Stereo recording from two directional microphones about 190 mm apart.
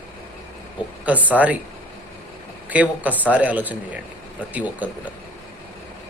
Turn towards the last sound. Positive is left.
turn(degrees=-10)  # may be behind; listen again after turning